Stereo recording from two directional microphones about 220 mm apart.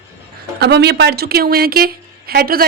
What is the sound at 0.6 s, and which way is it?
A woman's voice, 50° right (ahead or behind).